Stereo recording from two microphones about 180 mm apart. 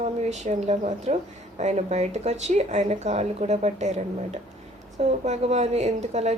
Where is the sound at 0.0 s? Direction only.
40° right (ahead or behind).